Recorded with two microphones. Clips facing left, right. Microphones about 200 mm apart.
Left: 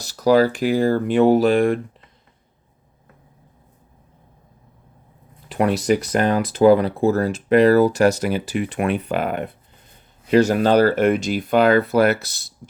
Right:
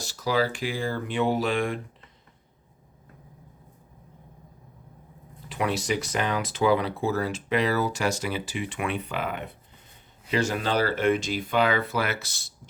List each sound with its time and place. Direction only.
0.3 s speech: 45° left (ahead or behind)
5.5 s speech: 55° left (ahead or behind)
8.7 s speech: 45° left (ahead or behind)
10.9 s speech: 60° left (ahead or behind)
11.4 s speech: 45° left (ahead or behind)